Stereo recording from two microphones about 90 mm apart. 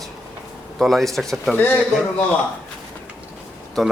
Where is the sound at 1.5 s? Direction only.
20° left (ahead or behind).